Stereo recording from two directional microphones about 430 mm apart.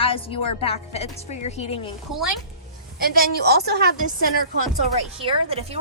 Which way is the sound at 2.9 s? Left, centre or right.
Right.